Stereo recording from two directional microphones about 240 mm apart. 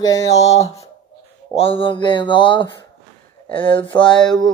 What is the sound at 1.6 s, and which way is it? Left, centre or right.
Speech, left.